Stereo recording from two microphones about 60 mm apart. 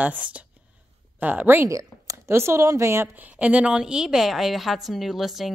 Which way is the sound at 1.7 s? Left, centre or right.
Right.